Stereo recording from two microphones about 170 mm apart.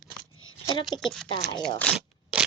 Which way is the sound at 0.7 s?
25° left (ahead or behind).